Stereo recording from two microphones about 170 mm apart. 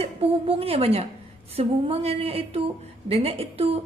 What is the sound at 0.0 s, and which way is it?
A woman's voice, 35° right (ahead or behind).